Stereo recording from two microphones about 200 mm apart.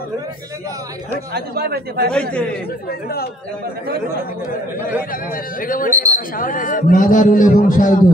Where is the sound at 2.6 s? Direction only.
50° left (ahead or behind).